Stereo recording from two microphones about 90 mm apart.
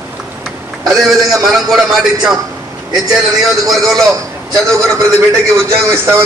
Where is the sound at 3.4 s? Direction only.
Centre (ahead or behind).